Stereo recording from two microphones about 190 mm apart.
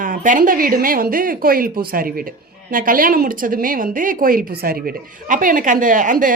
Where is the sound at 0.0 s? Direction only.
45° right (ahead or behind).